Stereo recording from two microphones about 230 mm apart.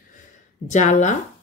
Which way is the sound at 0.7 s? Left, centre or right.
Left.